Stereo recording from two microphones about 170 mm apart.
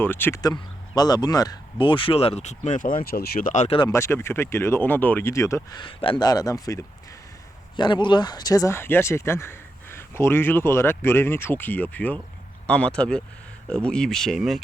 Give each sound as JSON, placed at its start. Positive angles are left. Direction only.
{"t": 0.0, "sound": "speech", "side_deg": 10}
{"t": 3.5, "sound": "speech", "side_deg": 45}
{"t": 3.8, "sound": "speech", "side_deg": 15}
{"t": 5.8, "sound": "speech", "side_deg": 30}